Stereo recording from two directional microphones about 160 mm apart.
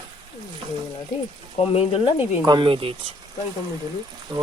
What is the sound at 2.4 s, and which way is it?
Speech, 30° right (ahead or behind).